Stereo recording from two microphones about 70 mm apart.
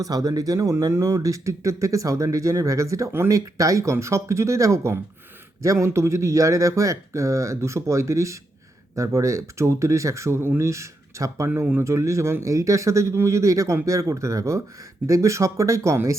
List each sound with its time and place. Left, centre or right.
0.0 s speech: right